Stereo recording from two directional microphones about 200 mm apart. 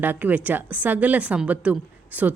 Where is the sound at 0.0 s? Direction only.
10° right (ahead or behind).